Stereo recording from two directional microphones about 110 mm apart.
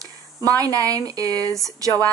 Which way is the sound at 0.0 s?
30° right (ahead or behind).